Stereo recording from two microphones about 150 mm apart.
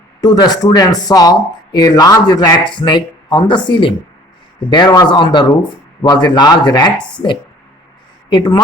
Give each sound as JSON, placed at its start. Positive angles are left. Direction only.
{"t": 0.2, "sound": "speech", "side_deg": 25}
{"t": 8.3, "sound": "speech", "side_deg": 30}